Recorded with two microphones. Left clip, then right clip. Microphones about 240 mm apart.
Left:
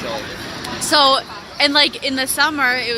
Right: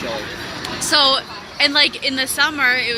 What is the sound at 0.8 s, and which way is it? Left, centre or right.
A woman's voice, centre.